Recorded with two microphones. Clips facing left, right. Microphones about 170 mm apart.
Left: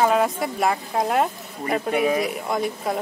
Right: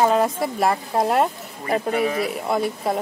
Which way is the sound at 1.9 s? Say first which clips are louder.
Left 4 dB; 10° left (ahead or behind).